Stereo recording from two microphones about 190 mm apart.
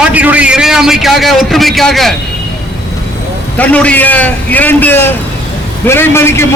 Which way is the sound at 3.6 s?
5° left (ahead or behind).